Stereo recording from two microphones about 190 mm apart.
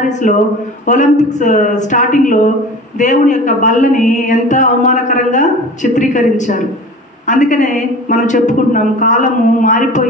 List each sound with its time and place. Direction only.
0.1 s a woman's voice: 40° left (ahead or behind)